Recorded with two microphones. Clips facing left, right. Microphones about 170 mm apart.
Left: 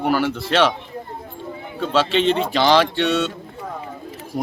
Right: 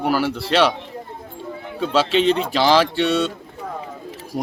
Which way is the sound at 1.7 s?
5° right (ahead or behind).